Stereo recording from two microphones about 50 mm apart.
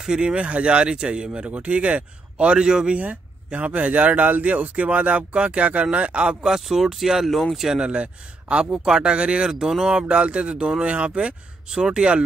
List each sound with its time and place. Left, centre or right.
0.0 s speech: centre
3.0 s speech: right
6.4 s speech: centre
7.8 s speech: right